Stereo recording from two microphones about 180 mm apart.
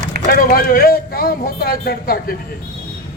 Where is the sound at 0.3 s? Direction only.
55° left (ahead or behind).